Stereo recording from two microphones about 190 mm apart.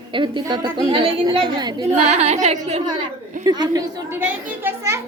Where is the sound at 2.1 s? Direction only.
35° right (ahead or behind).